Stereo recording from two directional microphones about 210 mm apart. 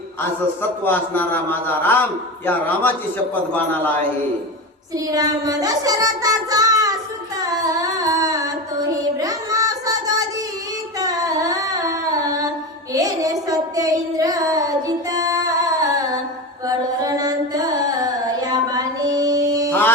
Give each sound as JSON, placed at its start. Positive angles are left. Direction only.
{"t": 0.2, "sound": "a man's voice", "side_deg": 10}
{"t": 5.1, "sound": "child singing", "side_deg": -15}
{"t": 7.3, "sound": "singing", "side_deg": -15}
{"t": 11.0, "sound": "carnatic music", "side_deg": -15}
{"t": 12.9, "sound": "a sound", "side_deg": -15}
{"t": 16.6, "sound": "carnatic music", "side_deg": -15}